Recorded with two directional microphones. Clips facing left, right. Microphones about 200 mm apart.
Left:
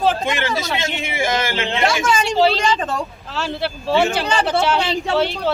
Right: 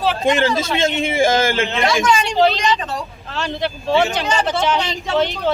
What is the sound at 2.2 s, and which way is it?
Speech, 5° left (ahead or behind).